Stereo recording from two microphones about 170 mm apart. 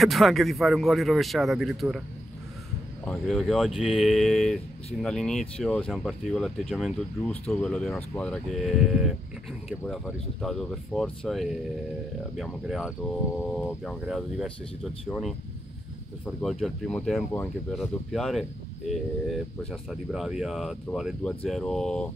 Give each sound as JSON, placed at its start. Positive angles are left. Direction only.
{"t": 0.0, "sound": "speech", "side_deg": 0}
{"t": 3.1, "sound": "speech", "side_deg": 0}